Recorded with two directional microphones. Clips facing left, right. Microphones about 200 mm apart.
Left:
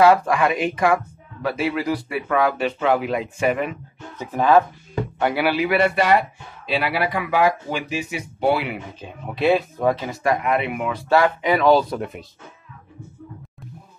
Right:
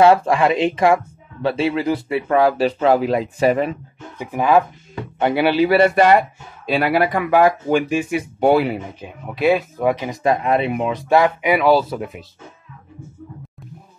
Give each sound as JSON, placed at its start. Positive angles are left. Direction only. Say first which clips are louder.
{"t": 0.0, "sound": "speech", "louder": "right 2 dB", "side_deg": -25}
{"t": 4.2, "sound": "speech", "louder": "even", "side_deg": -15}
{"t": 5.2, "sound": "a man's voice", "louder": "right 5 dB", "side_deg": -25}
{"t": 9.3, "sound": "speech", "louder": "right 2 dB", "side_deg": 0}
{"t": 9.9, "sound": "speech", "louder": "right 3 dB", "side_deg": -15}